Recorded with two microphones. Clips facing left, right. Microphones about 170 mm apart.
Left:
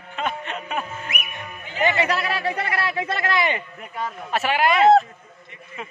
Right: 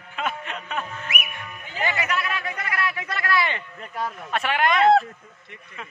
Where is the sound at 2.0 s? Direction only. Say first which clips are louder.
Left 4 dB; 35° left (ahead or behind); by 3.6 s 20° left (ahead or behind).